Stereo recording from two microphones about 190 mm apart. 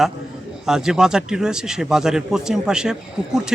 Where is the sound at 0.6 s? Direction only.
5° right (ahead or behind).